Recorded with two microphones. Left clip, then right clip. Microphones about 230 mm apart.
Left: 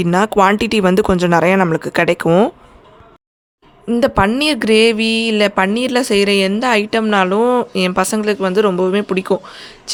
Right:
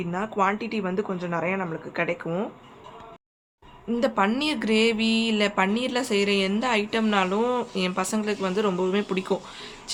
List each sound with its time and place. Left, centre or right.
0.0 s speech: left
3.8 s speech: left